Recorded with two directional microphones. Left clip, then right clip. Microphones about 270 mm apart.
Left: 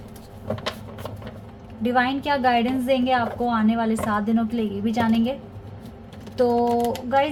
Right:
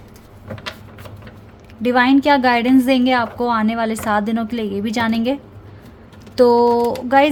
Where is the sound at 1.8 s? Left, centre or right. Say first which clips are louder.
Right 7 dB; right.